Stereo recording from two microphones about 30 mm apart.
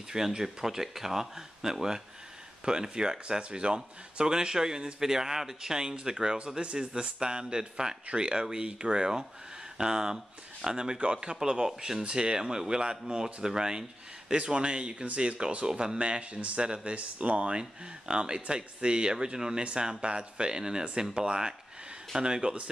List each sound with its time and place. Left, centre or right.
0.4 s speech: centre; by 11.3 s right
11.3 s speech: centre
12.1 s speech: right
14.3 s speech: right
16.0 s speech: right
16.5 s speech: right
17.6 s speech: right